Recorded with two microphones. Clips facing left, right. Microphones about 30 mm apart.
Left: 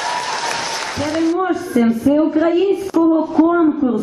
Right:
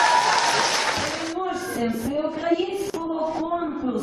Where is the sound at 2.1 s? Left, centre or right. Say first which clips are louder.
Left 12 dB; left.